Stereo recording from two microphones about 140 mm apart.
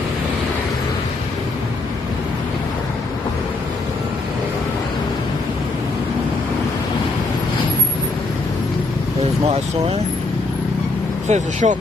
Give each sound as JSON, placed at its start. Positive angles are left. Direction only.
{"t": 11.2, "sound": "speech", "side_deg": -55}